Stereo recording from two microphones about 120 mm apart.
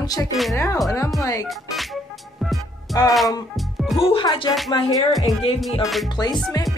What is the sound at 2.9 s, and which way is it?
Speech, 30° left (ahead or behind).